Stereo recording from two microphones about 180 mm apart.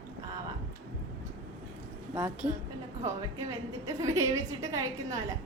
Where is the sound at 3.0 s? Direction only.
20° right (ahead or behind).